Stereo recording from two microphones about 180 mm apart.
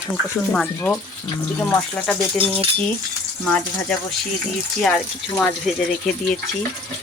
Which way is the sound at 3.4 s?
5° left (ahead or behind).